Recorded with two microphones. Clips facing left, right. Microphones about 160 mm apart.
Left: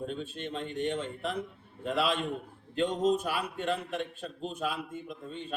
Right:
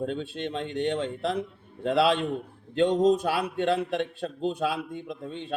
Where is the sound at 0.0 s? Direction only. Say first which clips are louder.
Right 6 dB; 75° right (ahead or behind).